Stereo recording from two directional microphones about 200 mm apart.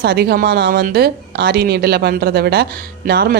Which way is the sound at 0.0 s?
50° right (ahead or behind).